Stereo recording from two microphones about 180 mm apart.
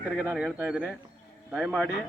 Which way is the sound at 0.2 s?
5° right (ahead or behind).